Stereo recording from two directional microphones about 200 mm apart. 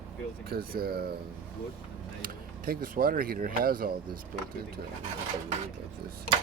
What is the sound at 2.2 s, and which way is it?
Speech, 45° right (ahead or behind).